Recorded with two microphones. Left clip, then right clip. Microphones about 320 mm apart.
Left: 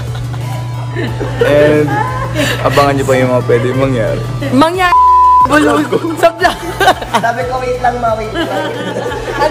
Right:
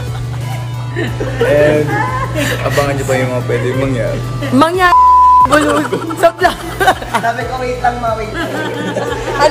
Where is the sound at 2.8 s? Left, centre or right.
Centre.